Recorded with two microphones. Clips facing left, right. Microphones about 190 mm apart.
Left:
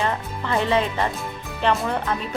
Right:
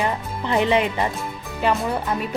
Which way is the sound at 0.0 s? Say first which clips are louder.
Right 1 dB; 15° right (ahead or behind).